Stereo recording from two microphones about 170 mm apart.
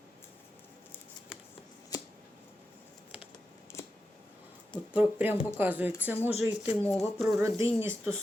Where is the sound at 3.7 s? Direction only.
15° left (ahead or behind).